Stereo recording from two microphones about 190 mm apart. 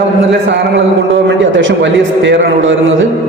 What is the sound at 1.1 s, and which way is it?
A man's voice, 75° right (ahead or behind).